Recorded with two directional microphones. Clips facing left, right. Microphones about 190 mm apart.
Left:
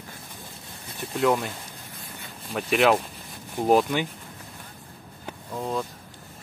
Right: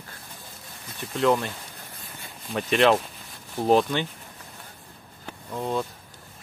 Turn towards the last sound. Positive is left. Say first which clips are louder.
# right 1 dB
turn(degrees=0)  # may be behind; listen again after turning